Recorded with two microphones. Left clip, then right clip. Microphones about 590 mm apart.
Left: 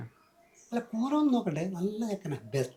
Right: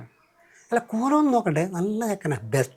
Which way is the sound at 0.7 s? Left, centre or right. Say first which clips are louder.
Right 9 dB; right.